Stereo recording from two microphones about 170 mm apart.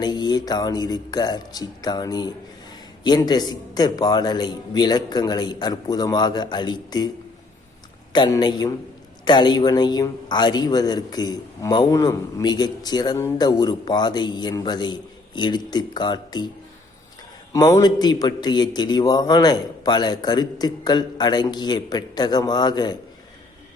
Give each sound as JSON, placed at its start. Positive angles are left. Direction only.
{"t": 0.0, "sound": "a man's voice", "side_deg": 25}
{"t": 8.1, "sound": "a man's voice", "side_deg": 25}
{"t": 17.5, "sound": "a man's voice", "side_deg": 20}